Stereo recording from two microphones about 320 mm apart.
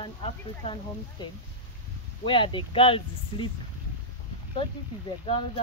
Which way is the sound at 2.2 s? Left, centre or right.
Centre.